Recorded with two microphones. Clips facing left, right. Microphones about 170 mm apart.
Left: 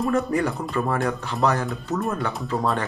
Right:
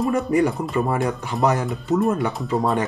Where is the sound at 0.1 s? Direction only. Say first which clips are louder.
Right 3 dB; 10° right (ahead or behind).